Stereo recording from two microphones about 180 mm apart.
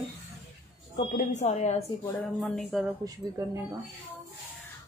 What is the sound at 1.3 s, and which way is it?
Speech, 35° left (ahead or behind).